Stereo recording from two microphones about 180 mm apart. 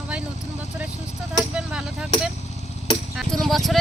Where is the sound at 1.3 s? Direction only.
5° right (ahead or behind).